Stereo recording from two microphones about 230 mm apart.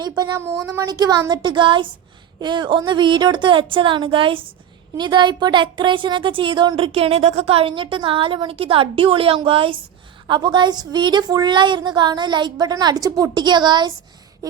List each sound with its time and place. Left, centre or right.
0.0 s a woman's voice: centre